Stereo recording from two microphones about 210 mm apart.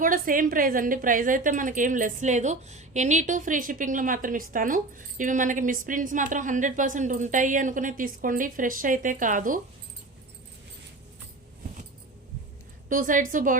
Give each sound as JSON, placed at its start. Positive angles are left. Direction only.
{"t": 0.0, "sound": "a woman's voice", "side_deg": -40}
{"t": 12.9, "sound": "a woman's voice", "side_deg": -40}